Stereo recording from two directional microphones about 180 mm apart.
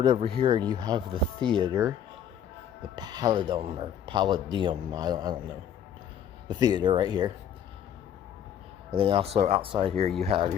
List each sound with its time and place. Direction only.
0.0 s speech: 30° right (ahead or behind)
2.9 s speech: 25° right (ahead or behind)
6.5 s speech: 25° right (ahead or behind)
8.9 s speech: 30° right (ahead or behind)